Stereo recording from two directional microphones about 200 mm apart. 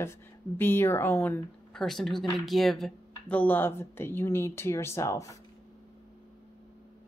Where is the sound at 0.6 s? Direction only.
10° left (ahead or behind).